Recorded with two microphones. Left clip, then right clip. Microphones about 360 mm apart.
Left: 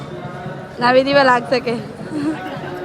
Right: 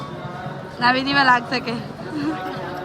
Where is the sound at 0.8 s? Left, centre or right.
Centre.